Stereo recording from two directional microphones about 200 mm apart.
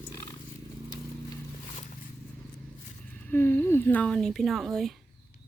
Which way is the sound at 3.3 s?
10° left (ahead or behind).